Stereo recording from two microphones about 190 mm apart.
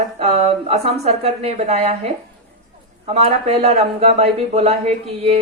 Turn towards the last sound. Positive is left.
turn(degrees=-35)  # may be behind; listen again after turning